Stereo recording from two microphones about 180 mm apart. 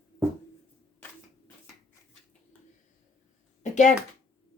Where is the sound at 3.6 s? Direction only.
40° left (ahead or behind).